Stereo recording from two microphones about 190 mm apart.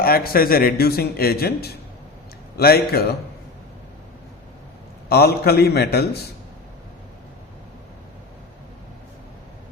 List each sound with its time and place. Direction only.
0.0 s a man's voice: 50° left (ahead or behind)
5.0 s a man's voice: 55° left (ahead or behind)